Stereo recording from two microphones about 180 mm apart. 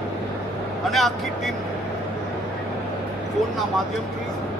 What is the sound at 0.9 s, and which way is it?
Speech, centre (ahead or behind).